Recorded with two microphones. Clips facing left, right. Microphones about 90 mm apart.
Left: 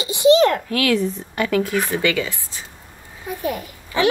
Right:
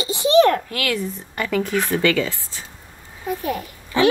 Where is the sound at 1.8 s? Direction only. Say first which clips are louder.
Right 2 dB; 15° left (ahead or behind).